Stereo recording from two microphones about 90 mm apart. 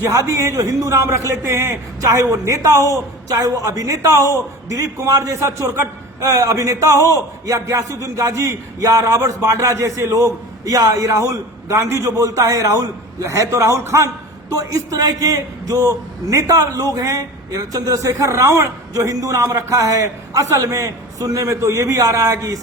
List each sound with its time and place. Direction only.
0.0 s a man's voice: 35° right (ahead or behind)